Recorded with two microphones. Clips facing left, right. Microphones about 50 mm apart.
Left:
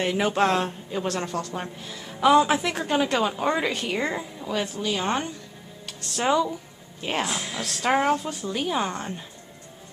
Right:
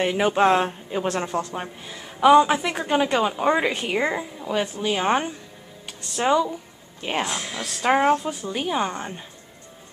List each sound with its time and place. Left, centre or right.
0.0 s a woman's voice: centre
5.9 s a woman's voice: centre